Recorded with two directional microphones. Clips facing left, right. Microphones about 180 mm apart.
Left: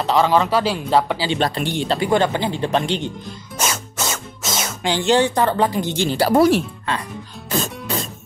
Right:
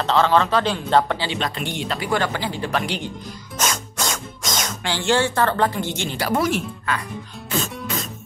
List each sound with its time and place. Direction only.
0.0 s speech: 10° left (ahead or behind)
1.4 s speech: 35° left (ahead or behind)
3.5 s music: 5° left (ahead or behind)
4.9 s speech: 20° left (ahead or behind)
5.9 s speech: 30° left (ahead or behind)
7.5 s music: 40° left (ahead or behind)